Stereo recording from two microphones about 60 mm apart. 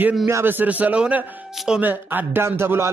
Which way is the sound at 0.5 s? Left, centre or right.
Right.